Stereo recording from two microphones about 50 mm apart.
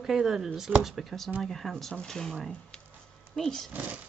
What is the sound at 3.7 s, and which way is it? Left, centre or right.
Speech, right.